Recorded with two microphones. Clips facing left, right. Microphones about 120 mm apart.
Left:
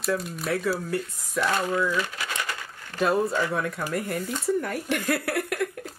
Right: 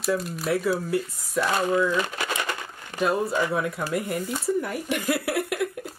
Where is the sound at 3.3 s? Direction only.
10° right (ahead or behind).